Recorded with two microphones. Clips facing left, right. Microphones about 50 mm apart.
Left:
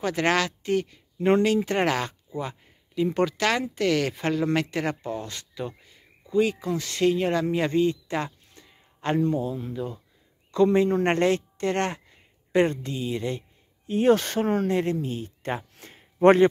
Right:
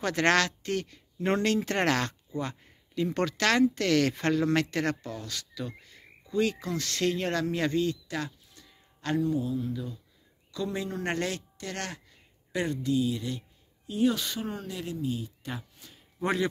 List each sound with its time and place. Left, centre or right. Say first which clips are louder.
0.0 s a woman's voice: left 1 dB; centre
2.2 s a sound: left 2 dB; centre
3.1 s a woman's voice: left 2 dB; centre
5.0 s speech: left 6 dB; left
5.8 s speech: right 2 dB; centre; by 15.6 s left
15.8 s a sound: left 17 dB; left